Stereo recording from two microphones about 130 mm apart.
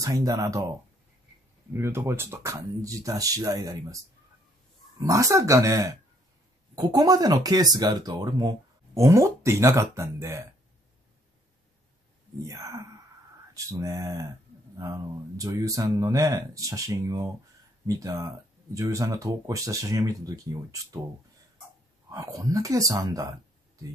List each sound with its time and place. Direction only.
0.0 s speech: 30° right (ahead or behind)
12.4 s speech: 25° right (ahead or behind)
22.1 s speech: 25° right (ahead or behind)